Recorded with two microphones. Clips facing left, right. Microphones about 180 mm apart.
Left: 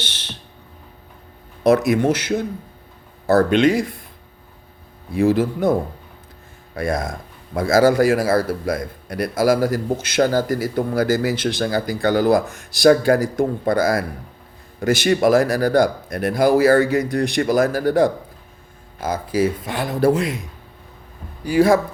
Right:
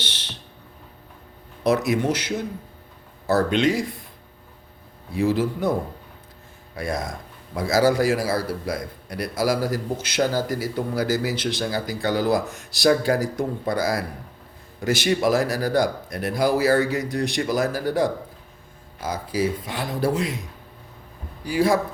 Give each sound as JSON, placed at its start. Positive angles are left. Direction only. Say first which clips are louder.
{"t": 1.6, "sound": "a man's voice", "louder": "left 5 dB", "side_deg": 55}
{"t": 5.1, "sound": "a man's voice", "louder": "left 4 dB", "side_deg": 55}
{"t": 6.7, "sound": "a man's voice", "louder": "left 5 dB", "side_deg": 50}
{"t": 21.4, "sound": "a man's voice", "louder": "left 5 dB", "side_deg": 55}